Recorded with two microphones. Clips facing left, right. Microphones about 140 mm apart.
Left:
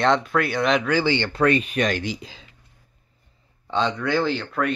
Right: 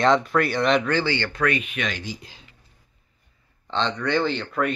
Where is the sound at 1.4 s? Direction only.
35° left (ahead or behind).